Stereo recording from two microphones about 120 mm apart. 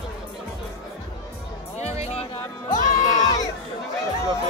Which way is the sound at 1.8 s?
60° left (ahead or behind).